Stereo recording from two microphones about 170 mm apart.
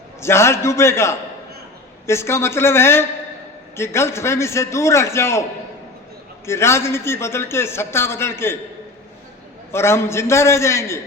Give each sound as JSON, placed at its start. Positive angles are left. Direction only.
{"t": 0.2, "sound": "a man's voice", "side_deg": 15}
{"t": 9.7, "sound": "a man's voice", "side_deg": 15}